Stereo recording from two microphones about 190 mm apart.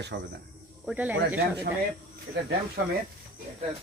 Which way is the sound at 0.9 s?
10° right (ahead or behind).